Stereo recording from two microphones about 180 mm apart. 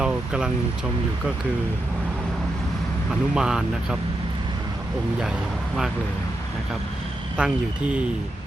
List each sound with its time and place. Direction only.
0.0 s speech: 5° right (ahead or behind)
3.1 s speech: 5° right (ahead or behind)
7.3 s speech: 5° right (ahead or behind)